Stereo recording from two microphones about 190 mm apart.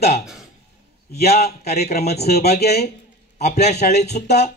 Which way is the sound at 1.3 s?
35° left (ahead or behind).